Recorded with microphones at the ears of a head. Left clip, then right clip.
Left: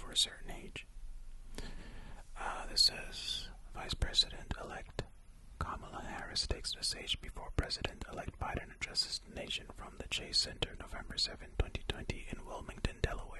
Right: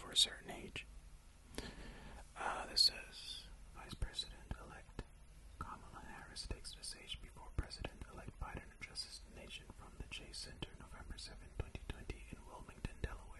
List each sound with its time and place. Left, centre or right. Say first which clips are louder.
0.0 s speech: left 1 dB; centre
1.5 s whispering: even; centre
2.9 s speech: left 9 dB; left